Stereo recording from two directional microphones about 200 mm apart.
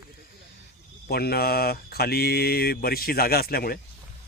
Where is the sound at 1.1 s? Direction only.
50° left (ahead or behind).